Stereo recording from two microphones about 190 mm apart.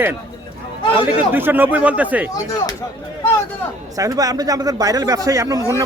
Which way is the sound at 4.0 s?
20° right (ahead or behind).